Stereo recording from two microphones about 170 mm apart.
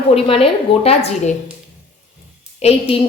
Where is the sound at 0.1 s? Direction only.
35° left (ahead or behind).